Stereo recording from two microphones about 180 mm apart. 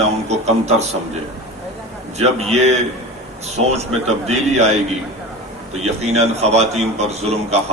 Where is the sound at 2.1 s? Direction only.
40° right (ahead or behind).